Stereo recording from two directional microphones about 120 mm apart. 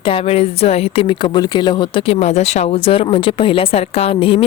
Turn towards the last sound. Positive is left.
turn(degrees=50)  # may be behind; listen again after turning